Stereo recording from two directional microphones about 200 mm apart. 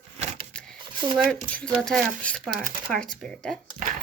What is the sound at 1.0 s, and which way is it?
Speech, 20° right (ahead or behind).